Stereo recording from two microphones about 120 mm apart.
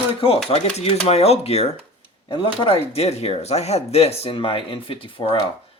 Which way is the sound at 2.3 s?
50° left (ahead or behind).